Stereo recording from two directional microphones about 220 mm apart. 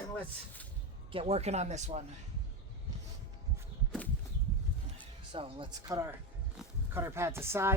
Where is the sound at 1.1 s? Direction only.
25° right (ahead or behind).